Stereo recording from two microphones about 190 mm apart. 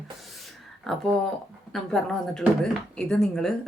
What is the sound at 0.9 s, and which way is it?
A woman's voice, centre (ahead or behind).